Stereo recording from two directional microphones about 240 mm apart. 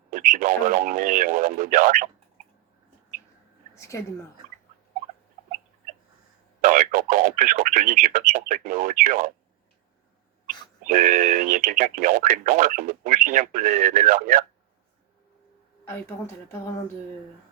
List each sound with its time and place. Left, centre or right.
0.1 s speech: right
3.8 s a woman's voice: centre
6.6 s speech: right
10.8 s speech: right
15.8 s a woman's voice: centre